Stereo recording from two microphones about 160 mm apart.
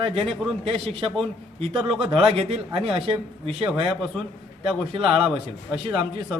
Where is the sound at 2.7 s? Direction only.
35° right (ahead or behind).